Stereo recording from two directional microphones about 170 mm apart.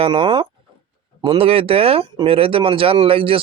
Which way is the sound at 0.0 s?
30° right (ahead or behind).